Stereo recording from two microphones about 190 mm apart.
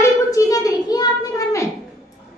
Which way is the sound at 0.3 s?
20° left (ahead or behind).